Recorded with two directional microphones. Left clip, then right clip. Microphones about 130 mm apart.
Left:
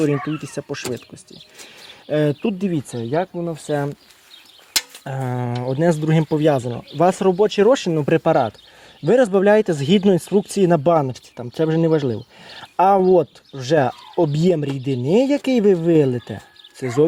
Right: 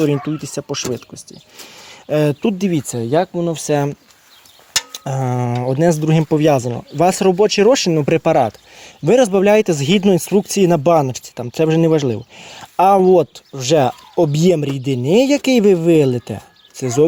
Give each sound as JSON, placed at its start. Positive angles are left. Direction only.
{"t": 0.0, "sound": "speech", "side_deg": -20}
{"t": 3.1, "sound": "speech", "side_deg": -45}
{"t": 4.9, "sound": "a sound", "side_deg": -30}
{"t": 5.6, "sound": "speech", "side_deg": -25}